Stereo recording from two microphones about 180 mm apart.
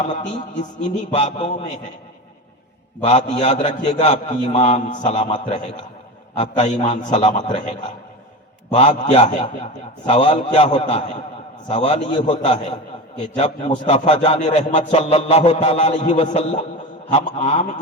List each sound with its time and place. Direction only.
0.0 s a man's voice: 40° left (ahead or behind)
3.0 s a man's voice: 35° left (ahead or behind)